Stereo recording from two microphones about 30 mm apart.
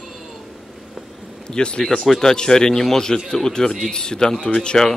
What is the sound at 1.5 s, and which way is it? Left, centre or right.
A man's voice, left.